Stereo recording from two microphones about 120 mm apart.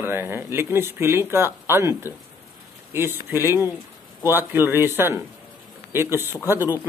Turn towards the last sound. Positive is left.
turn(degrees=-20)  # may be behind; listen again after turning